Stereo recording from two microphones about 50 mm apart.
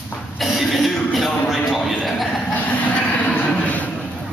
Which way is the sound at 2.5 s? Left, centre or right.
Left.